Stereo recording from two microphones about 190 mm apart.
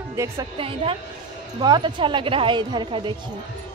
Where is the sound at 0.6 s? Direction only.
30° right (ahead or behind).